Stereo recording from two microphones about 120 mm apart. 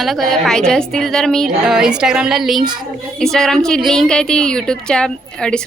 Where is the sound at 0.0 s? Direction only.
Centre (ahead or behind).